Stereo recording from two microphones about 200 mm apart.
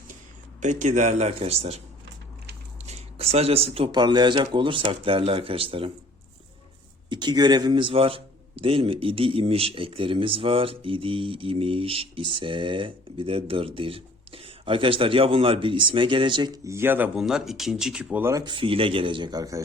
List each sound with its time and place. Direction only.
0.6 s a man's voice: 35° right (ahead or behind)
2.8 s a man's voice: 30° right (ahead or behind)
7.1 s a man's voice: 20° right (ahead or behind)